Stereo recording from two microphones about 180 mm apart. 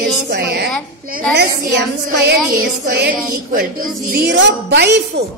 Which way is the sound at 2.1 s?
65° right (ahead or behind).